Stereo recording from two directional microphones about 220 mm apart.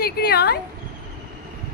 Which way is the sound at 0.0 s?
45° left (ahead or behind).